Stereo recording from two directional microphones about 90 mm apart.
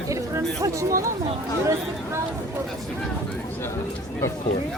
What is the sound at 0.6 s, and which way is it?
Speech, 35° right (ahead or behind).